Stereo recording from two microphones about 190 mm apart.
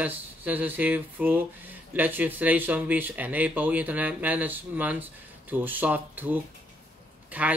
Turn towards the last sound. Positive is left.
turn(degrees=-5)  # may be behind; listen again after turning